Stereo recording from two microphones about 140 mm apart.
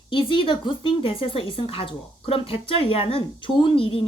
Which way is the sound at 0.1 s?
35° left (ahead or behind).